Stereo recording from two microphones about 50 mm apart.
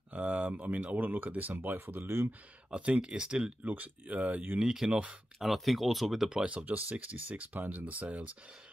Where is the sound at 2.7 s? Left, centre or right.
Right.